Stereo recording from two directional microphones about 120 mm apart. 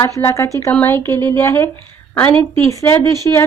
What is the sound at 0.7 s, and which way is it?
Speech, 15° left (ahead or behind).